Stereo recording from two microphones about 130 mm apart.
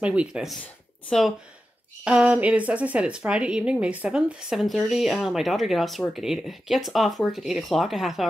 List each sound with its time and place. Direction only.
0.0 s speech: 10° right (ahead or behind)
2.0 s speech: 10° right (ahead or behind)